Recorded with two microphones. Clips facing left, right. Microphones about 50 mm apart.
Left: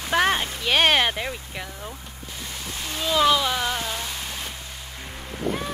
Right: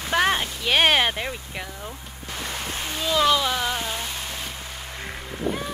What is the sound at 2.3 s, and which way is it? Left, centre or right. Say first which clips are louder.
Music: right 5 dB; right.